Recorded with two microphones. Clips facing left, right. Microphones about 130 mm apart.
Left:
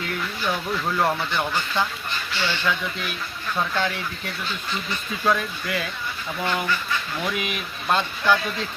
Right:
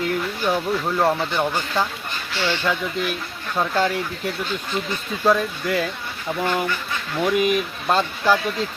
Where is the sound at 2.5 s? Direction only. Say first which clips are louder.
Right 4 dB; 40° right (ahead or behind).